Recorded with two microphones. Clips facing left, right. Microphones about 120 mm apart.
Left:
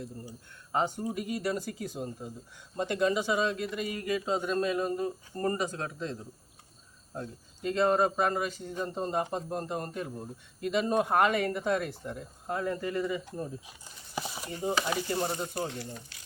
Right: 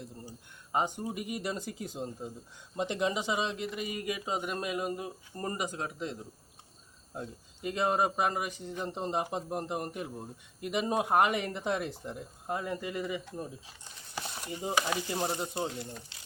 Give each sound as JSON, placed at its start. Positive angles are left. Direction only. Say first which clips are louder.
{"t": 0.7, "sound": "a man's voice", "louder": "left 1 dB", "side_deg": -20}
{"t": 7.2, "sound": "a man's voice", "louder": "left 2 dB", "side_deg": -15}
{"t": 13.8, "sound": "speech", "louder": "left 3 dB", "side_deg": 5}
{"t": 14.8, "sound": "a sound", "louder": "left 2 dB", "side_deg": 0}
{"t": 15.4, "sound": "speech", "louder": "left 1 dB", "side_deg": -20}